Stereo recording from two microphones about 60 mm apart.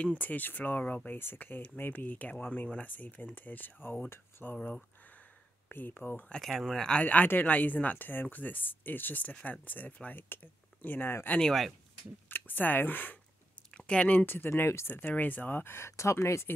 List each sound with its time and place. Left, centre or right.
0.0 s speech: left
1.1 s speech: left
5.7 s speech: left
6.4 s speech: centre
7.0 s speech: left
11.2 s speech: centre
12.3 s speech: left
13.7 s speech: centre; by 14.9 s left
14.9 s speech: left